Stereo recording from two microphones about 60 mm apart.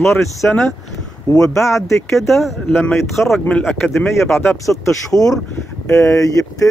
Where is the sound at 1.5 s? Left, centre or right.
Left.